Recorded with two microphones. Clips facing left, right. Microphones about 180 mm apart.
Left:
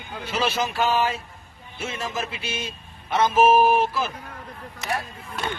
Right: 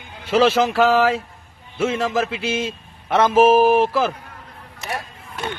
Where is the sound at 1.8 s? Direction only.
70° right (ahead or behind); by 4.1 s 90° right.